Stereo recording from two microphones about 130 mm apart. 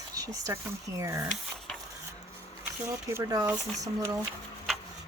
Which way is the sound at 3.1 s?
25° right (ahead or behind).